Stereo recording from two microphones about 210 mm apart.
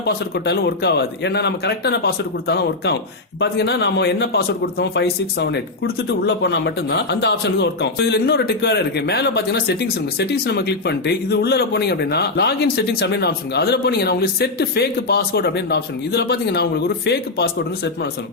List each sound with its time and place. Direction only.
0.0 s a man's voice: 50° left (ahead or behind)